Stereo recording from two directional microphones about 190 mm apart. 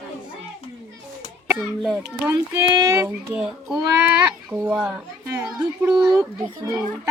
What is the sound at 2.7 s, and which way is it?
Speech, 15° right (ahead or behind).